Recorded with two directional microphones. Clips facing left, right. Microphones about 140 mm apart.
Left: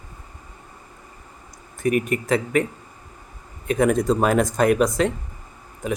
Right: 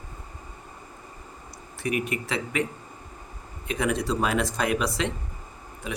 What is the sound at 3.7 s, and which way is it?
Speech, 45° left (ahead or behind).